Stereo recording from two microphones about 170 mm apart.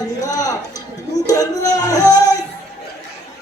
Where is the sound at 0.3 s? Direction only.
20° left (ahead or behind).